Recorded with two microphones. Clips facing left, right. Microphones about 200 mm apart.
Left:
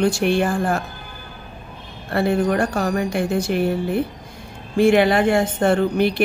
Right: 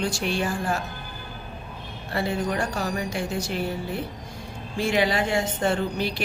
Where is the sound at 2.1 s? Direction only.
55° left (ahead or behind).